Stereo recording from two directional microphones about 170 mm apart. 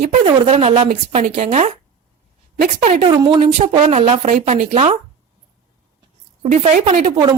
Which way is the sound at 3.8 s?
40° right (ahead or behind).